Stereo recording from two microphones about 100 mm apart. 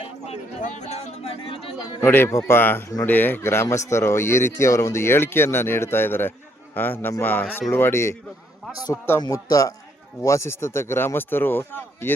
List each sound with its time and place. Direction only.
0.9 s a sound: 85° left; by 2.0 s 65° left (ahead or behind)
2.0 s speech: 20° left (ahead or behind)
9.2 s speech: 35° left (ahead or behind); by 12.1 s 20° left (ahead or behind)